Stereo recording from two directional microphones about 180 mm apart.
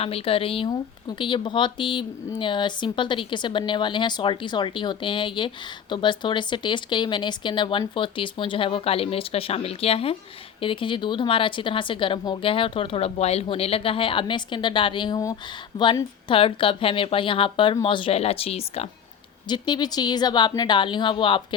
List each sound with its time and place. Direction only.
0.0 s speech: 30° left (ahead or behind)
19.5 s speech: 25° left (ahead or behind)